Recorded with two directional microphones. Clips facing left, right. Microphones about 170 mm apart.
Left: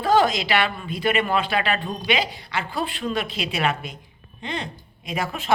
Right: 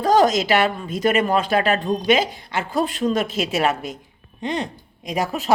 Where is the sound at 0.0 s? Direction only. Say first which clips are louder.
Right 3 dB; 40° right (ahead or behind).